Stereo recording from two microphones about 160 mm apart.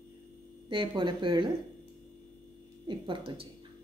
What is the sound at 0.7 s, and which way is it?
Speech, 30° right (ahead or behind).